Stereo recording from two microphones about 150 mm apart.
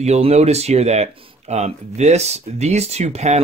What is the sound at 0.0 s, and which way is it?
Speech, 45° right (ahead or behind).